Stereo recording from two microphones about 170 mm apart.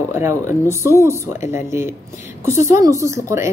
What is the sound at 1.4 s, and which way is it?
Speech, 45° left (ahead or behind).